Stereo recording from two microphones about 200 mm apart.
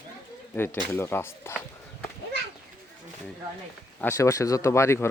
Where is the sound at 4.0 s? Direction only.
15° left (ahead or behind).